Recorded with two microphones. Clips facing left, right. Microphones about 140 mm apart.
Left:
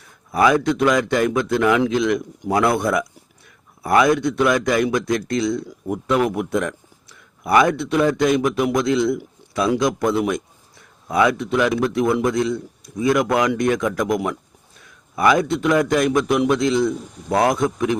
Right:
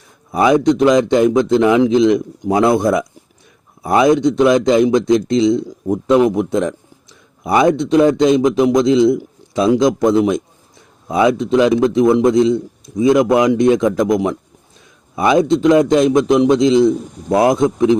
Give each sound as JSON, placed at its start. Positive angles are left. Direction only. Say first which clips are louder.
{"t": 0.3, "sound": "a man's voice", "louder": "right 4 dB", "side_deg": -20}